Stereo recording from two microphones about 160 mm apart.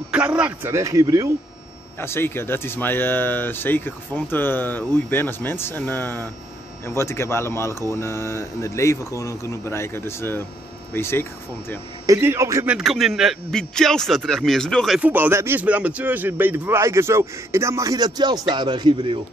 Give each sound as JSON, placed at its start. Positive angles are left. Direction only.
{"t": 0.1, "sound": "speech", "side_deg": -10}
{"t": 2.0, "sound": "speech", "side_deg": 15}
{"t": 12.1, "sound": "speech", "side_deg": -15}
{"t": 12.7, "sound": "a man's voice", "side_deg": 0}
{"t": 15.0, "sound": "speech", "side_deg": -10}